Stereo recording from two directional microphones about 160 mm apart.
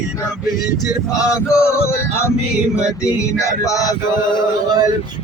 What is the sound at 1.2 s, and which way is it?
Male singing, 15° left (ahead or behind).